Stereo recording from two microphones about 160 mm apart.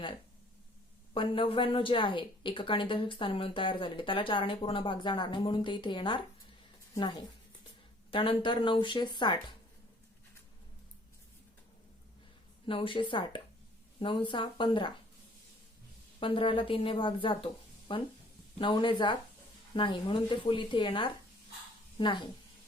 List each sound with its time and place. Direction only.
1.1 s a woman's voice: 35° left (ahead or behind)
12.6 s speech: 30° left (ahead or behind)
16.2 s speech: 35° left (ahead or behind)